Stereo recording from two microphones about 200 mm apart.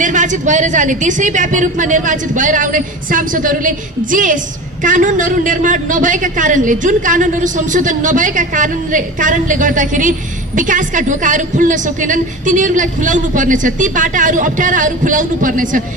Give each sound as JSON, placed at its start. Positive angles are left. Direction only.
{"t": 0.0, "sound": "a woman's voice", "side_deg": -40}